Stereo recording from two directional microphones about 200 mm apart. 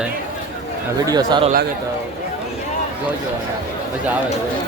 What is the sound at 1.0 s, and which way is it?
Speech, 20° right (ahead or behind).